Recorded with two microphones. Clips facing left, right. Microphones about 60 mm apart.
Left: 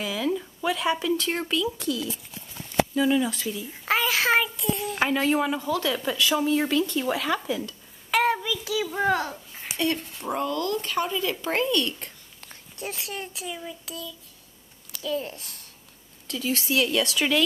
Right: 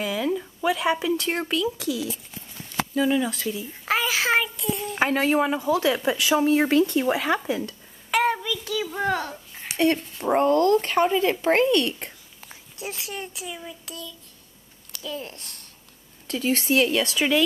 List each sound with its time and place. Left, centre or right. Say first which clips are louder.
0.0 s a child's voice: right 2 dB; centre
2.9 s a child's voice: right 4 dB; centre
5.2 s speech: right 2 dB; centre
6.4 s speech: right 4 dB; right
8.1 s child singing: even; centre
8.9 s a child's voice: left 2 dB; centre
10.3 s speech: right 9 dB; right
12.4 s a child's voice: left 1 dB; centre
16.3 s speech: right 4 dB; right
16.9 s speech: right 2 dB; centre